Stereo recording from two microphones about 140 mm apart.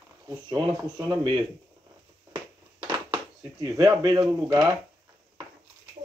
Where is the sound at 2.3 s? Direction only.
30° right (ahead or behind).